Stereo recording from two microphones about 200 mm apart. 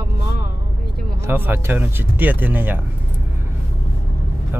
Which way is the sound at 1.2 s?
10° right (ahead or behind).